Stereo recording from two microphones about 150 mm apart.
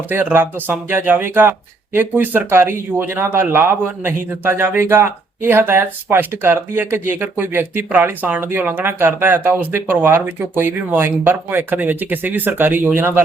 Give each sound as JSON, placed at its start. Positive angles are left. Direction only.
{"t": 0.1, "sound": "speech", "side_deg": -15}